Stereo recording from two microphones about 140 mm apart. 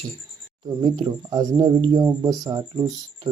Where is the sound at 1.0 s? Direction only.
30° right (ahead or behind).